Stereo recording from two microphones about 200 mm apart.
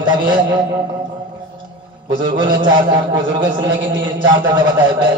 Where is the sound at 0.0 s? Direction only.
20° right (ahead or behind).